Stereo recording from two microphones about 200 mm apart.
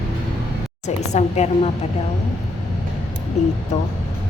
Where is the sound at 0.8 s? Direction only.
35° left (ahead or behind).